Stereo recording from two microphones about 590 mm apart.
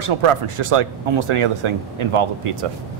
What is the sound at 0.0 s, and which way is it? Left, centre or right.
Speech, right.